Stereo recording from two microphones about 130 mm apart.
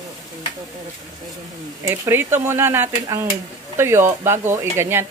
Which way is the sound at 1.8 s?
20° right (ahead or behind).